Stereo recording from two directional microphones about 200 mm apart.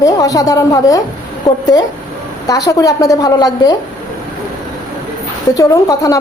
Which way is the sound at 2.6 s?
15° left (ahead or behind).